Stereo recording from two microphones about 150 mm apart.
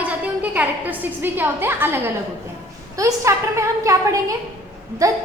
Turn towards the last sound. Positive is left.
turn(degrees=-20)  # may be behind; listen again after turning